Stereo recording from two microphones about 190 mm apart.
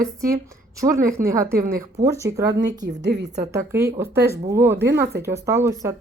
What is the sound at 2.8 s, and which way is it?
Speech, 65° right (ahead or behind).